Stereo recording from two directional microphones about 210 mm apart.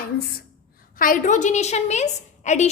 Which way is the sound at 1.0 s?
40° left (ahead or behind).